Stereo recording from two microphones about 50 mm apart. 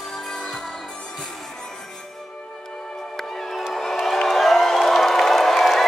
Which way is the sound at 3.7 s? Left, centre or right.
Centre.